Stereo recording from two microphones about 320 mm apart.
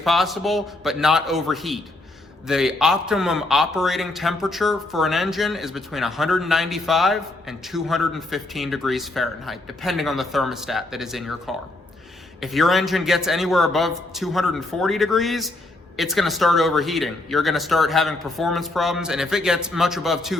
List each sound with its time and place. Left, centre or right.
0.0 s a man's voice: centre